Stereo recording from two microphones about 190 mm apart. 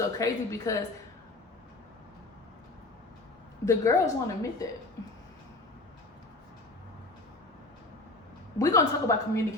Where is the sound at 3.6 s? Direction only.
15° left (ahead or behind).